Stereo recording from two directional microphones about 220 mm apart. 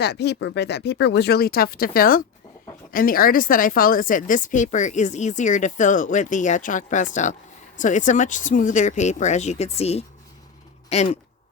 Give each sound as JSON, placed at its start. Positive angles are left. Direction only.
{"t": 0.0, "sound": "a woman's voice", "side_deg": 50}